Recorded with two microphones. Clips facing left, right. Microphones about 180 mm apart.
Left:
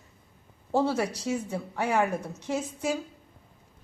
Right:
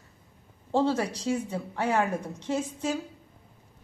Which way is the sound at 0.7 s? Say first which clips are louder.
Even; 10° left (ahead or behind).